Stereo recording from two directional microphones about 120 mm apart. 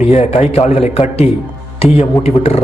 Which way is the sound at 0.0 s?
65° left (ahead or behind).